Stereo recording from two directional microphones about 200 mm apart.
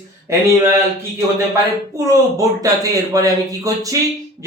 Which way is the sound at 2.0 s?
15° right (ahead or behind).